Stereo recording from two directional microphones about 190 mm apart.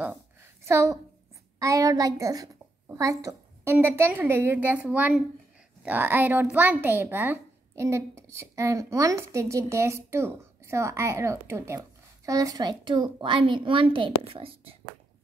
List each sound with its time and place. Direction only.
0.7 s a woman's voice: 15° right (ahead or behind); by 15.0 s 30° right (ahead or behind)